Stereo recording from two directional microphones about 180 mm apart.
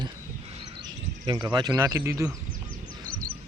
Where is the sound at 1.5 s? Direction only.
25° right (ahead or behind).